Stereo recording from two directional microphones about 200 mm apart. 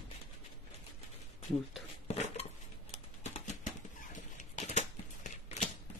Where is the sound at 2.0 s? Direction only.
30° left (ahead or behind).